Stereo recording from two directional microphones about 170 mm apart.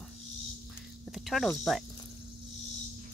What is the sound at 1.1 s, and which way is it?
Cricket, centre (ahead or behind).